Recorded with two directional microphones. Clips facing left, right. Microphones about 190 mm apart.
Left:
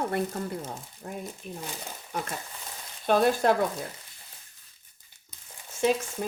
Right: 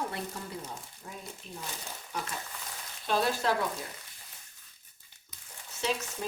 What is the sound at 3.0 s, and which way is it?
Speech, 55° left (ahead or behind).